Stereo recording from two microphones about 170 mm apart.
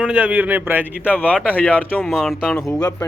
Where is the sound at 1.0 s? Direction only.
10° left (ahead or behind).